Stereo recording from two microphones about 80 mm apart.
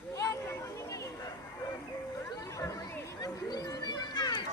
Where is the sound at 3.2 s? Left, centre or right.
Left.